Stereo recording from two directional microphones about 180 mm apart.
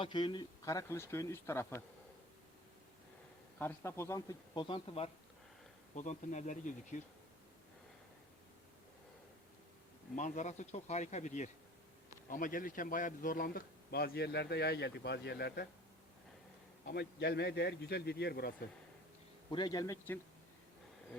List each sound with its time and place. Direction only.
0.0 s speech: 25° left (ahead or behind)
3.6 s speech: 15° left (ahead or behind); by 5.1 s 30° left (ahead or behind)
5.9 s speech: 40° left (ahead or behind)
10.2 s a man's voice: 40° left (ahead or behind); by 15.6 s 60° left (ahead or behind)
16.8 s a man's voice: 60° left (ahead or behind)
19.5 s speech: 25° left (ahead or behind)